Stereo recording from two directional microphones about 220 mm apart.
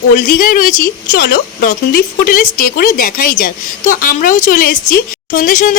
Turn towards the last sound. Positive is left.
turn(degrees=35)  # may be behind; listen again after turning